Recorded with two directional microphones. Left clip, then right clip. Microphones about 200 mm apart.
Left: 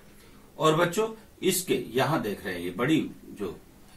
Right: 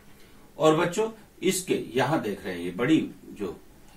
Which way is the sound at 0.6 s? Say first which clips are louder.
Right 1 dB; 15° right (ahead or behind).